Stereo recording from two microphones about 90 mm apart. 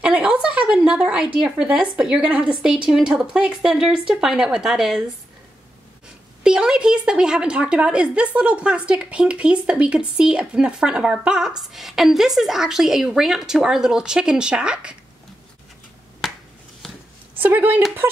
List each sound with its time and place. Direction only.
0.0 s a woman's voice: 10° right (ahead or behind)
6.4 s a woman's voice: 10° right (ahead or behind)
17.4 s speech: 20° right (ahead or behind)